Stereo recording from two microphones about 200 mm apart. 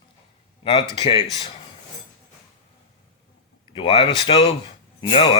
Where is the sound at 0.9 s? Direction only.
25° left (ahead or behind).